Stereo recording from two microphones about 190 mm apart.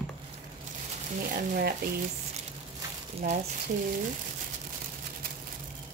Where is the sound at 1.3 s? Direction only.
50° right (ahead or behind).